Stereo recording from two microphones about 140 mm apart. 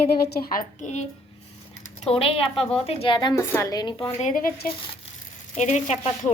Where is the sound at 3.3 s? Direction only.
20° left (ahead or behind).